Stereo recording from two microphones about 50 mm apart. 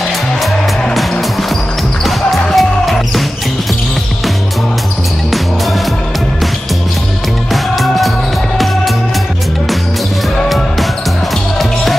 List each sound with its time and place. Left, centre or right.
2.0 s music: centre
7.5 s music: centre